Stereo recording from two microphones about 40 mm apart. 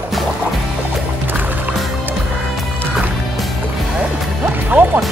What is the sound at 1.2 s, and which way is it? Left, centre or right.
Music, right.